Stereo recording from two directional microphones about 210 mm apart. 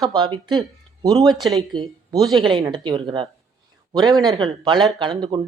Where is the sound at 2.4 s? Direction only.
20° right (ahead or behind).